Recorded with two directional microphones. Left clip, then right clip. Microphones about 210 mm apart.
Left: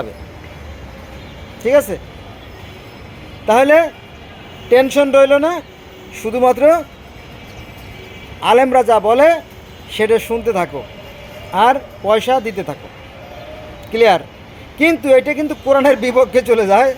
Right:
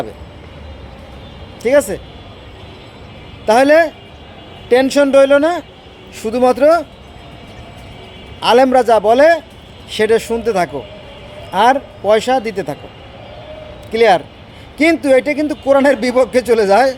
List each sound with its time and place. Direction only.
1.6 s speech: 15° right (ahead or behind)
3.4 s speech: 20° right (ahead or behind)
8.4 s speech: 20° right (ahead or behind)
11.5 s speech: 20° right (ahead or behind)
13.9 s speech: 15° right (ahead or behind)
15.4 s speech: 20° right (ahead or behind)